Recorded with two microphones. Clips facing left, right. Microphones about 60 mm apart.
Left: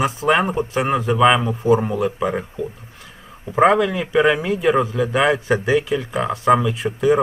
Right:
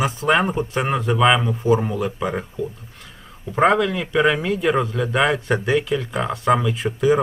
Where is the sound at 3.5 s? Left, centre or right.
Centre.